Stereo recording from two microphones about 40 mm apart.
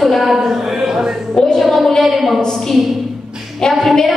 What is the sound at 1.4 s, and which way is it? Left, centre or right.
A woman's voice, centre.